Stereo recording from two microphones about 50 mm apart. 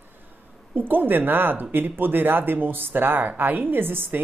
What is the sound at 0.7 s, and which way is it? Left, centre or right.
Speech, right.